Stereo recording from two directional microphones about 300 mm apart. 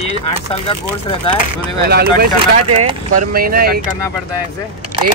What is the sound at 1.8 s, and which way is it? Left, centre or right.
Speech, right.